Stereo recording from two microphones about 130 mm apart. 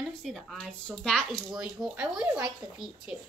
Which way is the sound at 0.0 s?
Centre (ahead or behind).